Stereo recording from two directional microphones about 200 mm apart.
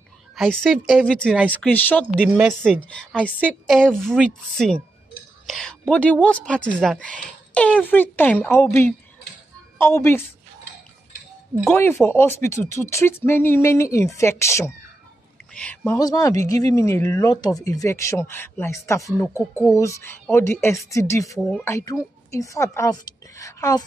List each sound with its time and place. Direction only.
0.4 s a woman's voice: centre (ahead or behind)
11.7 s speech: 10° left (ahead or behind)